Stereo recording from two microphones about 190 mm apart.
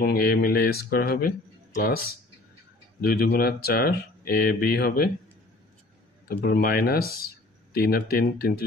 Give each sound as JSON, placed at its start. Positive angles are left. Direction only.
{"t": 0.0, "sound": "speech", "side_deg": 55}
{"t": 3.1, "sound": "speech", "side_deg": 55}
{"t": 6.2, "sound": "speech", "side_deg": 55}